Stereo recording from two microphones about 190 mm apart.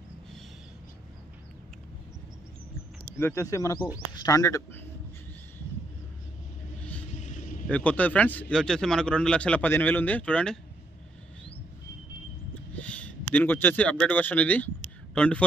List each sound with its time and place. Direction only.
3.2 s speech: 15° left (ahead or behind)
7.2 s vehicle: 40° left (ahead or behind)
7.6 s speech: 5° left (ahead or behind)
12.7 s a man's voice: 5° left (ahead or behind)